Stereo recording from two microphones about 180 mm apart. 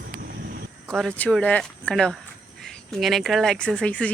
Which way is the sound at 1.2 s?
5° left (ahead or behind).